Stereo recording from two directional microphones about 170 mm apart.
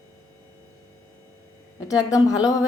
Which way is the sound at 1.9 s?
20° left (ahead or behind).